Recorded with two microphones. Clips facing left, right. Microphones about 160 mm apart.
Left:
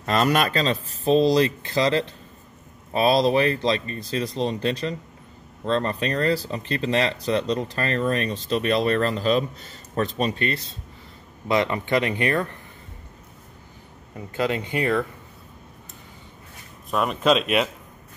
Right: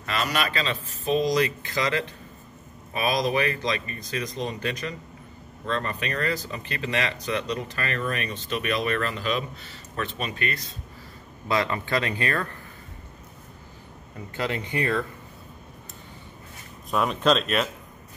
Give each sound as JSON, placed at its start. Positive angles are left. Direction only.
{"t": 0.0, "sound": "speech", "side_deg": 45}
{"t": 14.3, "sound": "speech", "side_deg": 20}
{"t": 16.9, "sound": "speech", "side_deg": 5}